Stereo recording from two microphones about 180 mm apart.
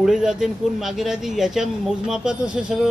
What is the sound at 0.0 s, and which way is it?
Speech, 5° right (ahead or behind).